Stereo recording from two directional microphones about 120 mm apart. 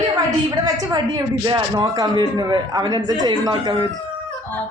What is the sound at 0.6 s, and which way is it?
Speech, 30° right (ahead or behind).